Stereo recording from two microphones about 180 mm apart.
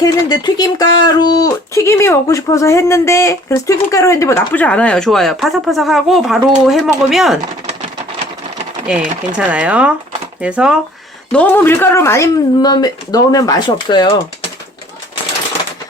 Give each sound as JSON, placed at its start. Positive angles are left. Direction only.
{"t": 0.0, "sound": "speech", "side_deg": 20}
{"t": 8.9, "sound": "speech", "side_deg": -5}
{"t": 11.3, "sound": "speech", "side_deg": 10}